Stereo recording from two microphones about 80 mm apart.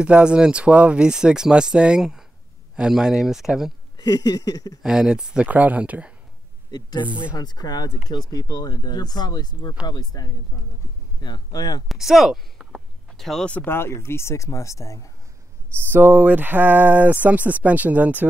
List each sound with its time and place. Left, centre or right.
0.0 s speech: centre
3.9 s a sound: left
4.8 s speech: centre
6.7 s speech: left
11.9 s speech: centre
13.2 s speech: centre
13.7 s speech: left
15.9 s speech: right